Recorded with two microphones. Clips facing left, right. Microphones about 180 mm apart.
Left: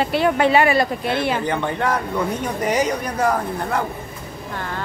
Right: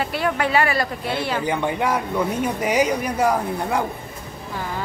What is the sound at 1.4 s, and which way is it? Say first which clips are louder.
A woman's voice: even; 10° right (ahead or behind).